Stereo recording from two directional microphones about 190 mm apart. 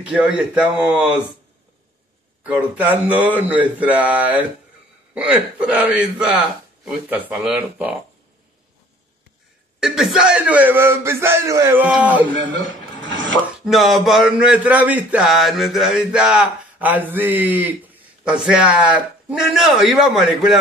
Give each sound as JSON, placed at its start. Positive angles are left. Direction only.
{"t": 0.1, "sound": "a man's voice", "side_deg": -5}
{"t": 2.4, "sound": "a man's voice", "side_deg": -10}
{"t": 9.8, "sound": "a man's voice", "side_deg": 0}
{"t": 12.3, "sound": "a man's voice", "side_deg": -80}
{"t": 13.7, "sound": "speech", "side_deg": 0}